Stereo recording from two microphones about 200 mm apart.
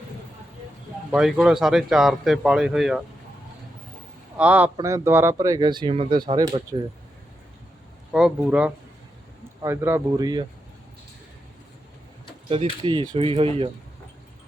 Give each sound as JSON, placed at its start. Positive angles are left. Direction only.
{"t": 1.1, "sound": "speech", "side_deg": 0}
{"t": 4.4, "sound": "speech", "side_deg": -5}
{"t": 8.1, "sound": "speech", "side_deg": -5}
{"t": 12.5, "sound": "speech", "side_deg": -25}